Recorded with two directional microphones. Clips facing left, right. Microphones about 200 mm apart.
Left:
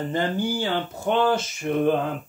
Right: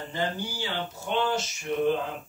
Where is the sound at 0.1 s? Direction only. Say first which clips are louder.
Left 5 dB; 50° left (ahead or behind).